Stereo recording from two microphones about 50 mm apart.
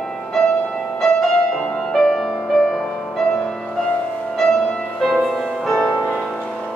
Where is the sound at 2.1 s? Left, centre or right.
Centre.